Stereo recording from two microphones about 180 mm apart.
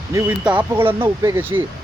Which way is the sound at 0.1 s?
15° right (ahead or behind).